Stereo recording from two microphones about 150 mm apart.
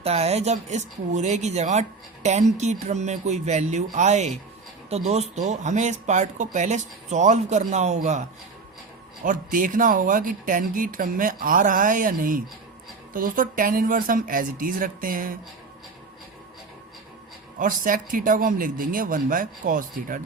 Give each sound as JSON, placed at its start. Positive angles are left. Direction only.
{"t": 0.0, "sound": "speech", "side_deg": -45}
{"t": 9.2, "sound": "speech", "side_deg": -60}
{"t": 17.6, "sound": "speech", "side_deg": -65}